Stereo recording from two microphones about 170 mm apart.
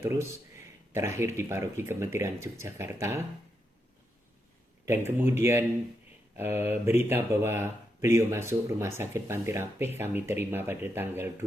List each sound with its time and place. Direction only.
0.0 s speech: 15° right (ahead or behind)
4.9 s speech: 15° right (ahead or behind)